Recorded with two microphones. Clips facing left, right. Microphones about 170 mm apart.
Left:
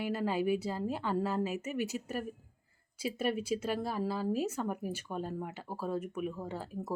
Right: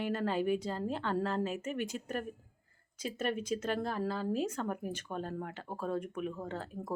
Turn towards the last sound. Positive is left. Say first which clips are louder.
# left 1 dB
turn(degrees=10)  # may be behind; listen again after turning